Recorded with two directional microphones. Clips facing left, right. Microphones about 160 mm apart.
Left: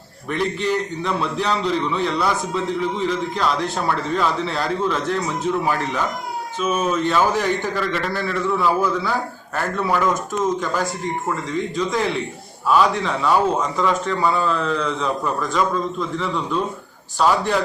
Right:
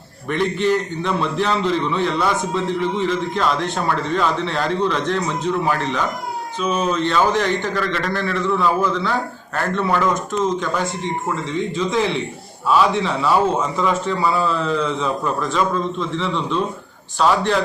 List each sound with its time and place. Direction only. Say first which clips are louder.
0.3 s a man's voice: right 3 dB; centre (ahead or behind)